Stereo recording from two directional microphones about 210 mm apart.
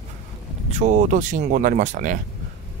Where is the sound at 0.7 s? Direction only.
35° right (ahead or behind).